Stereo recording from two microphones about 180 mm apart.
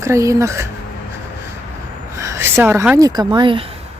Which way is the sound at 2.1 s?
15° right (ahead or behind).